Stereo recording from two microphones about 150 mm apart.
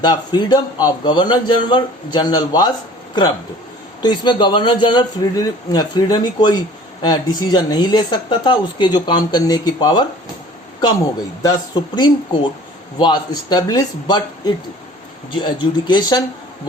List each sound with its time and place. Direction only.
0.0 s speech: 30° left (ahead or behind)
4.0 s speech: 30° left (ahead or behind)
11.4 s speech: 25° left (ahead or behind)